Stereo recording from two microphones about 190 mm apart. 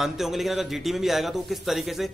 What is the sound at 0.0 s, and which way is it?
A man's voice, centre (ahead or behind).